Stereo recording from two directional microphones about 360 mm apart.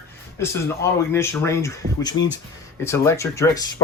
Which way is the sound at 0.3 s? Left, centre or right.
Centre.